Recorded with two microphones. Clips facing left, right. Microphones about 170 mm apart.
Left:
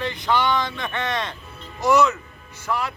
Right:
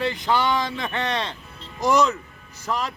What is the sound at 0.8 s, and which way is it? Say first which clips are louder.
Speech: even; 35° right (ahead or behind).